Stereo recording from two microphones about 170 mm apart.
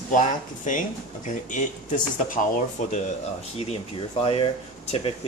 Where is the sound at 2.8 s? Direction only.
50° left (ahead or behind).